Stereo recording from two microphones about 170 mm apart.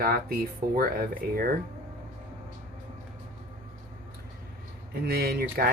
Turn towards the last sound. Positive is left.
turn(degrees=-65)  # may be behind; listen again after turning